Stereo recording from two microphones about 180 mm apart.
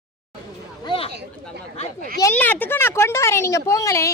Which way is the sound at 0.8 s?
30° left (ahead or behind).